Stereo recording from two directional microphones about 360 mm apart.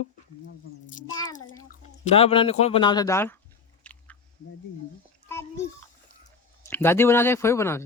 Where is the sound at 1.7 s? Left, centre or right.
Centre.